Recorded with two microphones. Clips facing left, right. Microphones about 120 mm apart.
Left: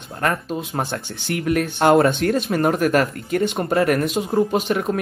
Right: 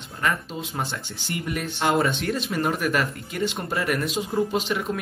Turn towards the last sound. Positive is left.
turn(degrees=50)  # may be behind; listen again after turning